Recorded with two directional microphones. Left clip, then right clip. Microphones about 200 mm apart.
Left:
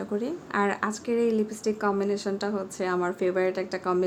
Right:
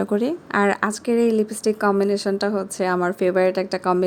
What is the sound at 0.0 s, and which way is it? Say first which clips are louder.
Speech: right 8 dB; 40° right (ahead or behind).